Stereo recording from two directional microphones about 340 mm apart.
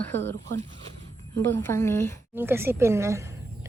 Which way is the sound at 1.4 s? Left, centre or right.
Centre.